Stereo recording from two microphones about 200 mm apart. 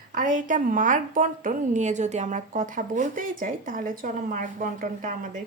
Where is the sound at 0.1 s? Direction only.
40° right (ahead or behind).